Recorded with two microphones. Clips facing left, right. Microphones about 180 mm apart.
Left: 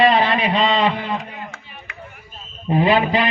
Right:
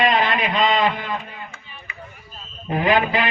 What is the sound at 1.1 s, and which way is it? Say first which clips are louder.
Chop: left 3 dB; 90° left.